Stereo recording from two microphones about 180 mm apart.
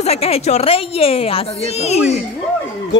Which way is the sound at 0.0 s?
35° left (ahead or behind).